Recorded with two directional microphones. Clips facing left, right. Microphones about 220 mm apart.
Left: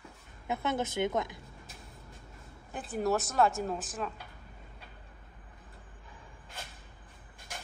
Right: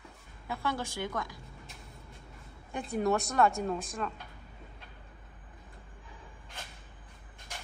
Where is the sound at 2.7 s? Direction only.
5° left (ahead or behind).